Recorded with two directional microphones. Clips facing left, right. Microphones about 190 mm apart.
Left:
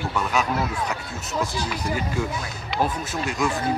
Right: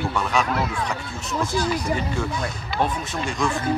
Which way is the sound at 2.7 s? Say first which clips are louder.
Even; 5° left (ahead or behind).